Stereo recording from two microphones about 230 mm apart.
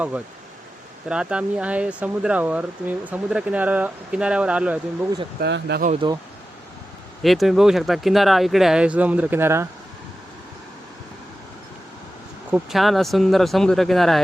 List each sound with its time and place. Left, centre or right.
1.0 s speech: centre
5.4 s speech: right
5.8 s speech: right
7.2 s speech: centre
12.5 s speech: centre